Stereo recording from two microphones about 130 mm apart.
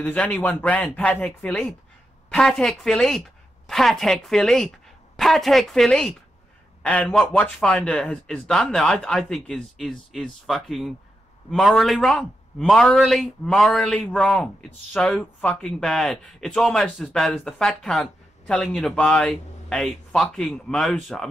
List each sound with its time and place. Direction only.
0.0 s a woman's voice: 10° left (ahead or behind)